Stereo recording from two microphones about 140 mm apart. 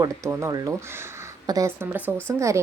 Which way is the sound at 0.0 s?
20° right (ahead or behind).